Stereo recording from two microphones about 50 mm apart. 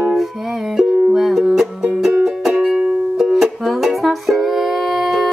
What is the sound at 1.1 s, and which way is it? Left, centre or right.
Music, centre.